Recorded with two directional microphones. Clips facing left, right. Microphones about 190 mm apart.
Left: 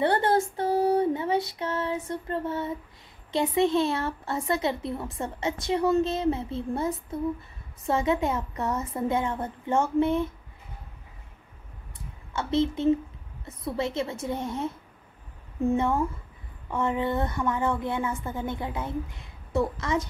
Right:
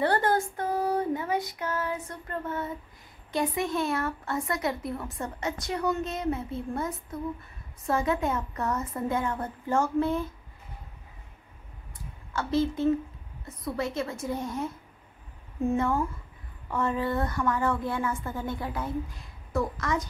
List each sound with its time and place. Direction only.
0.0 s a sound: 25° left (ahead or behind)
1.6 s a woman's voice: 25° left (ahead or behind)
12.3 s a woman's voice: 25° left (ahead or behind)
15.7 s a woman's voice: 25° left (ahead or behind)